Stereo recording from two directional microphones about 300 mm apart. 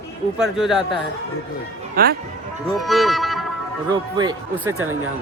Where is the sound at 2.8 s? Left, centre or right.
Centre.